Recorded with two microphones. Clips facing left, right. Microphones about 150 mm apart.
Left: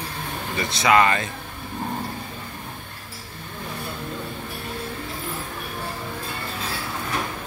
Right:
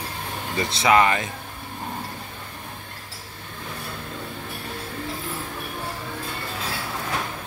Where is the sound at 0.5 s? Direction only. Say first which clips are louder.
Even; 25° right (ahead or behind).